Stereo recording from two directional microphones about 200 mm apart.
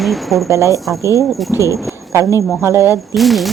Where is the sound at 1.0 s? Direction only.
15° left (ahead or behind).